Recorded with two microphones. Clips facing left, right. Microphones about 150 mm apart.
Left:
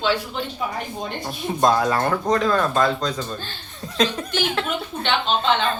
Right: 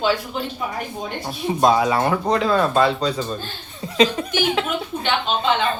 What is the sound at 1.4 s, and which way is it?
Speech, 5° right (ahead or behind).